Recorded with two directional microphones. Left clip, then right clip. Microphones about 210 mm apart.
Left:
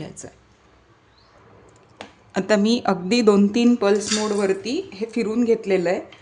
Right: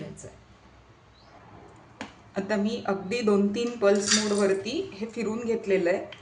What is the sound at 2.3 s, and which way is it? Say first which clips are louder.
Speech: left 9 dB; 50° left (ahead or behind).